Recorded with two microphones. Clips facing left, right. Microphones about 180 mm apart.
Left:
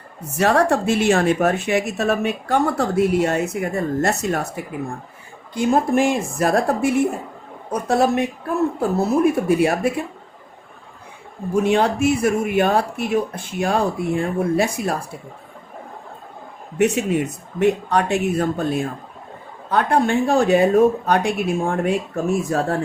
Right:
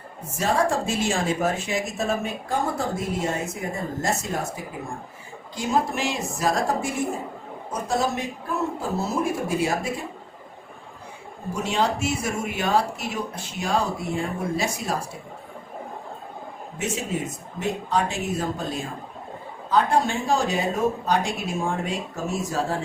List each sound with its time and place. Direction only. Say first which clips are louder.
0.3 s a woman's voice: left 6 dB; 70° left (ahead or behind)
5.5 s speech: left 7 dB; 50° left (ahead or behind)
11.5 s speech: left 7 dB; 55° left (ahead or behind)
16.7 s speech: left 10 dB; 65° left (ahead or behind)